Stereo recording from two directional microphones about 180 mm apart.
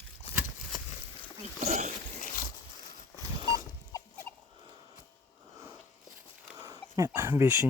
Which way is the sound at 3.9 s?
15° left (ahead or behind).